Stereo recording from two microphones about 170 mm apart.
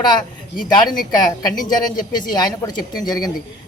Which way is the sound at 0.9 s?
25° left (ahead or behind).